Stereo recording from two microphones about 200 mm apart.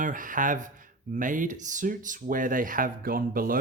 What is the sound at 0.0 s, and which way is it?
Speech, 40° right (ahead or behind).